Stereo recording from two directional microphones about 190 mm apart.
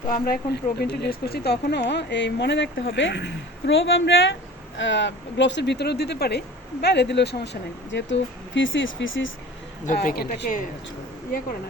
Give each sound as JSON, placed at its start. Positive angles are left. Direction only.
{"t": 0.1, "sound": "speech", "side_deg": 50}
{"t": 4.8, "sound": "speech", "side_deg": 70}
{"t": 9.8, "sound": "a woman's voice", "side_deg": 40}